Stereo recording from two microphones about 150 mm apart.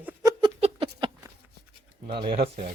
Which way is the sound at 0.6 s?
35° right (ahead or behind).